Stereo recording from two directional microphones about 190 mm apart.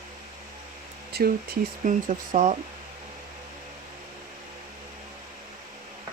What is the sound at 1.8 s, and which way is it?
Speech, 40° right (ahead or behind).